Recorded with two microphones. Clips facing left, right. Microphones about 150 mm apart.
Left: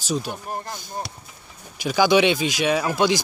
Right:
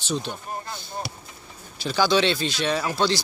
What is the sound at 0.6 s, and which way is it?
Speech, 45° left (ahead or behind).